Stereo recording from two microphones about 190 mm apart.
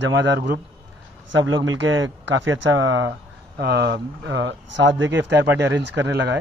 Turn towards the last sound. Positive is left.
turn(degrees=-65)  # may be behind; listen again after turning